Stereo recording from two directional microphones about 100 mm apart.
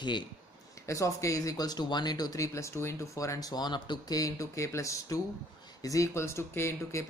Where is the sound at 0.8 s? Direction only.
30° left (ahead or behind).